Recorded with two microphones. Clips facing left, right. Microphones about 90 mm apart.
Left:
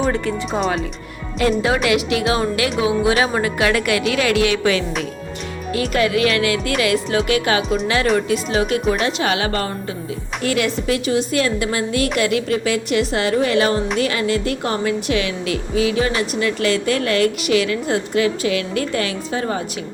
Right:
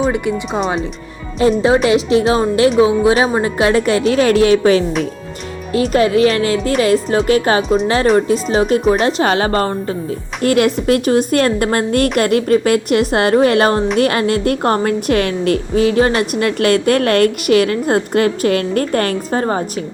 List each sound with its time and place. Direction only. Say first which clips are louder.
0.1 s speech: right 3 dB; 15° right (ahead or behind)
1.4 s speech: right 5 dB; 30° right (ahead or behind)
10.4 s a woman's voice: right 7 dB; 50° right (ahead or behind)